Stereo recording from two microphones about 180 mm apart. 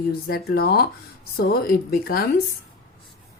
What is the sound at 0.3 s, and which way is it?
A woman's voice, 60° left (ahead or behind).